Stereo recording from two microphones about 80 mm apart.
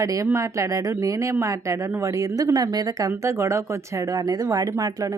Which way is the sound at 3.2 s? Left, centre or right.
Right.